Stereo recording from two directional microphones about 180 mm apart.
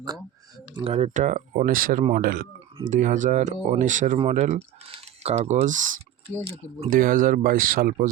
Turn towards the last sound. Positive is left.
turn(degrees=-50)  # may be behind; listen again after turning